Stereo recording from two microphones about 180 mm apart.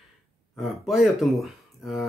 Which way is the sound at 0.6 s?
Centre (ahead or behind).